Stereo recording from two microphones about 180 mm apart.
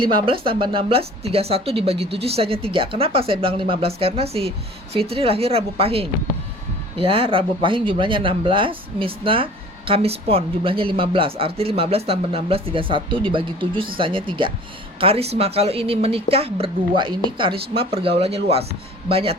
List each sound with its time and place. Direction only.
0.0 s speech: 25° right (ahead or behind)